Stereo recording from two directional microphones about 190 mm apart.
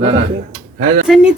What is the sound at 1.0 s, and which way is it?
Speech, 5° right (ahead or behind).